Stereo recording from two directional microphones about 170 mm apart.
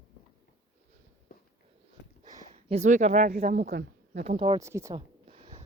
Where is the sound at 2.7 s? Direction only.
45° right (ahead or behind).